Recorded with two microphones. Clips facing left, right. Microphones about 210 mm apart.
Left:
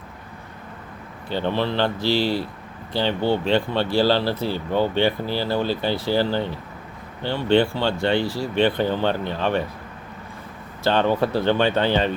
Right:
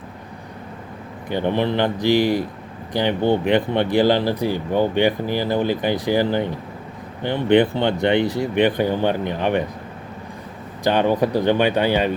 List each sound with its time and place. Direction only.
1.3 s speech: 15° right (ahead or behind)
10.8 s speech: 15° right (ahead or behind)